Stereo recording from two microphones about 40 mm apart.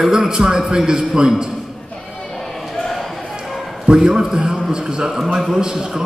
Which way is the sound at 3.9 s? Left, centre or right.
Centre.